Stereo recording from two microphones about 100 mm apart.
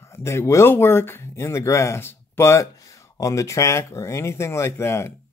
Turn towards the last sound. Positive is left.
turn(degrees=30)  # may be behind; listen again after turning